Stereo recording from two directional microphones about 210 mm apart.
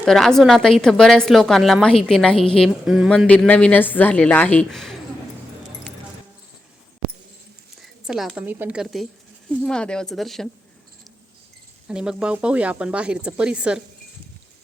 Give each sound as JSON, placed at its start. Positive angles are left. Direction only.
{"t": 0.0, "sound": "a woman's voice", "side_deg": 0}
{"t": 7.8, "sound": "a woman's voice", "side_deg": 0}
{"t": 11.9, "sound": "speech", "side_deg": -5}